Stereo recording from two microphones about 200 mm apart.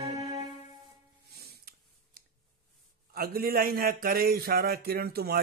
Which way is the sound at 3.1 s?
45° right (ahead or behind).